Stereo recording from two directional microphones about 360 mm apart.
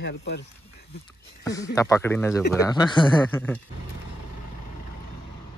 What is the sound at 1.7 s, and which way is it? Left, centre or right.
Speech, centre.